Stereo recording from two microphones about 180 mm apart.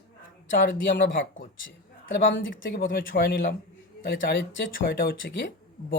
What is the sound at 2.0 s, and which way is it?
Speech, 80° left.